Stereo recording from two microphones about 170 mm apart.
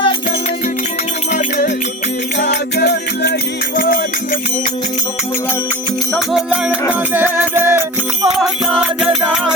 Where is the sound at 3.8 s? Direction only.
60° left (ahead or behind).